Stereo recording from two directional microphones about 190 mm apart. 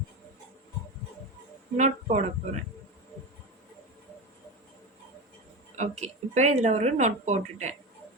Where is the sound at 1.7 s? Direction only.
40° right (ahead or behind).